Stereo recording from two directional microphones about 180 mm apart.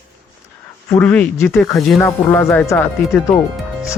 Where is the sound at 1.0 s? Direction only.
5° left (ahead or behind).